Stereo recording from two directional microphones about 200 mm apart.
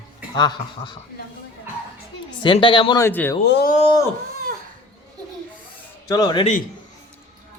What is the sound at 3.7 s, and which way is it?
Speech, 25° left (ahead or behind).